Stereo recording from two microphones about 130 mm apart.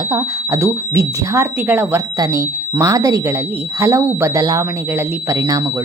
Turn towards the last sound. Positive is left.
turn(degrees=-30)  # may be behind; listen again after turning